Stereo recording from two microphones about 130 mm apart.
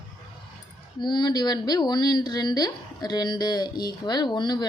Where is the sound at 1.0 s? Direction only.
35° left (ahead or behind).